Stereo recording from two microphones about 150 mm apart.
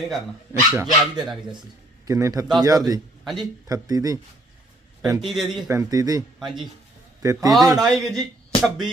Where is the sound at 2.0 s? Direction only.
20° right (ahead or behind).